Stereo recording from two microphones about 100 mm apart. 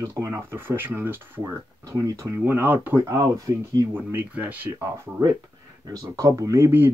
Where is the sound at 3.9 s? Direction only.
20° right (ahead or behind).